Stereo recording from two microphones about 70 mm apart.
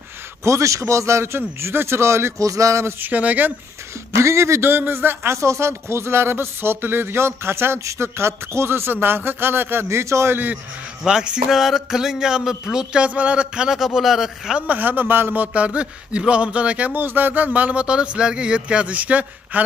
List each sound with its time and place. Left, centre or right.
0.4 s a man's voice: right
3.0 s a man's voice: right
4.1 s a man's voice: right
10.3 s a man's voice: right
11.1 s a man's voice: centre
13.7 s a man's voice: centre
14.7 s a man's voice: right